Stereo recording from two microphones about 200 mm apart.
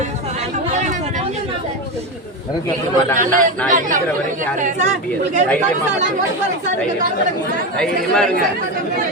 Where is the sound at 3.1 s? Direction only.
40° right (ahead or behind).